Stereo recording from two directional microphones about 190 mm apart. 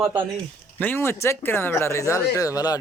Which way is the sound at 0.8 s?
10° left (ahead or behind).